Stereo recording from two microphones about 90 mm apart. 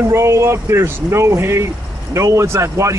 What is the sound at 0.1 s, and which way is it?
Speech, 30° right (ahead or behind).